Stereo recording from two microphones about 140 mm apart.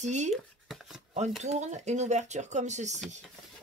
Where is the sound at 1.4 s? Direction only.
55° right (ahead or behind).